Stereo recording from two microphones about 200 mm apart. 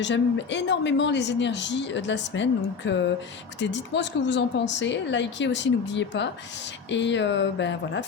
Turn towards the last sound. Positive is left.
turn(degrees=65)  # may be behind; listen again after turning